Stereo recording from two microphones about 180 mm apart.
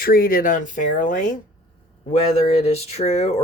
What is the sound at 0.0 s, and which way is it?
Speech, 55° left (ahead or behind).